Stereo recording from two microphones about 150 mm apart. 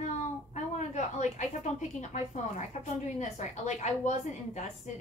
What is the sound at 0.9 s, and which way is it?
A woman's voice, 55° left (ahead or behind).